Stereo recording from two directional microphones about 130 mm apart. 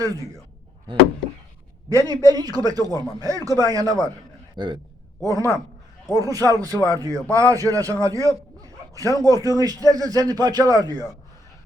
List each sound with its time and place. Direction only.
0.0 s speech: 25° right (ahead or behind)
1.9 s a man's voice: 25° right (ahead or behind)
5.2 s speech: 25° right (ahead or behind)
8.6 s bow-wow: 25° right (ahead or behind)
9.2 s speech: 25° right (ahead or behind)